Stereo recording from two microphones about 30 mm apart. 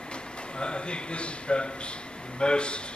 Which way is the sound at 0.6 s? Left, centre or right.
Left.